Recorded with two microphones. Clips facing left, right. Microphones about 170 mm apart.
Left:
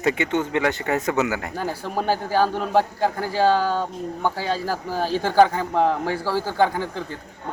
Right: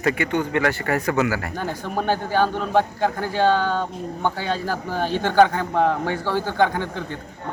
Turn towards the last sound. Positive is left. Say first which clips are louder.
# even
turn(degrees=5)  # may be behind; listen again after turning